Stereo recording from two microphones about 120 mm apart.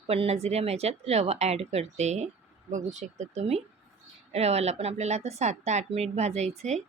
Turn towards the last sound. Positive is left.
turn(degrees=-70)  # may be behind; listen again after turning